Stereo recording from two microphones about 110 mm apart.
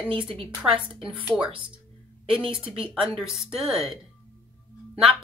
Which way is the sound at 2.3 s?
55° right (ahead or behind).